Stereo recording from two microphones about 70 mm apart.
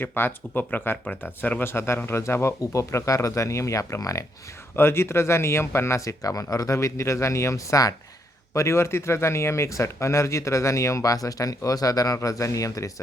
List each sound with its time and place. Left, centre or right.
0.0 s speech: left
4.8 s speech: left
8.5 s speech: left